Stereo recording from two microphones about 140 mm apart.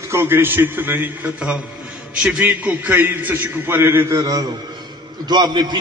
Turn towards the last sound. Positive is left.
turn(degrees=-30)  # may be behind; listen again after turning